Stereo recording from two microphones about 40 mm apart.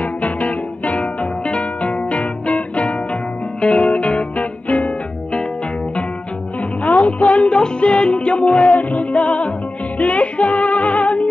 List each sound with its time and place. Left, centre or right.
0.0 s music: left
6.8 s music: left